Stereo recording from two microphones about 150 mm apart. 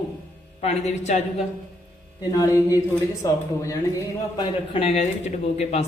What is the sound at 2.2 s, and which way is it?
Mantra, 20° left (ahead or behind).